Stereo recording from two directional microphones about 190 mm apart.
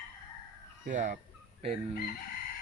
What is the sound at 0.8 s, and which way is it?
Speech, 40° right (ahead or behind).